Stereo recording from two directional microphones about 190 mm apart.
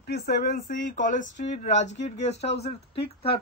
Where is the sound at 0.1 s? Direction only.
50° left (ahead or behind).